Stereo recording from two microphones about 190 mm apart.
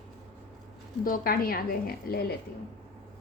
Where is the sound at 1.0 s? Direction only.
50° left (ahead or behind).